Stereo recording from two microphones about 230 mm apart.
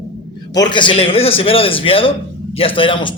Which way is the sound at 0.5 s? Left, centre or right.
Centre.